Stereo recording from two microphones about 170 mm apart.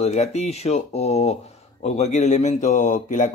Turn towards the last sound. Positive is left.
turn(degrees=45)  # may be behind; listen again after turning